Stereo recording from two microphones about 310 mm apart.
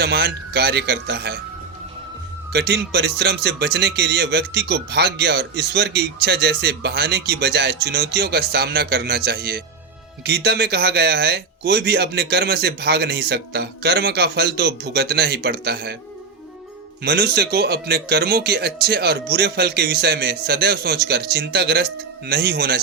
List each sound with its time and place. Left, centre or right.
0.0 s speech: right
2.5 s speech: right
17.0 s speech: right